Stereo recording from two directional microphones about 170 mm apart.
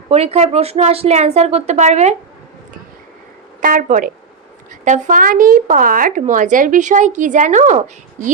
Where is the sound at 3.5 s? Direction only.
50° right (ahead or behind).